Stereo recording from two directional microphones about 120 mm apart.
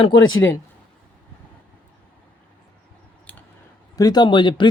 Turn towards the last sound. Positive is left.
turn(degrees=40)  # may be behind; listen again after turning